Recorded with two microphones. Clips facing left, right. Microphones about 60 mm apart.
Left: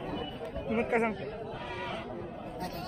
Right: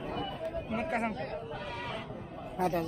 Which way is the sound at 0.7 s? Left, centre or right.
Centre.